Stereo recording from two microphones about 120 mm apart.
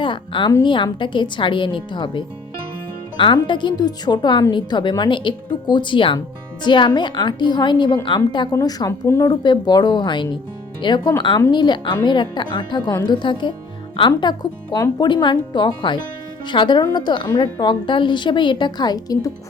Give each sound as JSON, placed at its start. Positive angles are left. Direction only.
{"t": 0.0, "sound": "a woman's voice", "side_deg": 45}
{"t": 8.5, "sound": "a woman's voice", "side_deg": 30}